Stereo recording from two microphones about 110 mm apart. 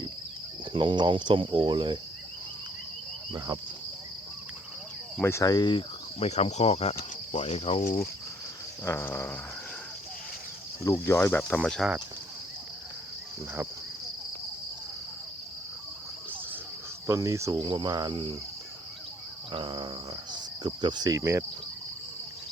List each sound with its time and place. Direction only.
0.7 s cricket: 45° right (ahead or behind)
3.3 s speech: 35° right (ahead or behind)
5.2 s speech: 30° left (ahead or behind)
6.1 s speech: 75° left (ahead or behind)
8.8 s speech: 20° left (ahead or behind)
10.8 s speech: 25° left (ahead or behind)
11.6 s cricket: centre (ahead or behind)
17.1 s cricket: 30° right (ahead or behind)
17.6 s cricket: 45° right (ahead or behind)
19.5 s cricket: 45° right (ahead or behind)
20.3 s insect: 45° right (ahead or behind)
21.2 s cricket: 25° right (ahead or behind)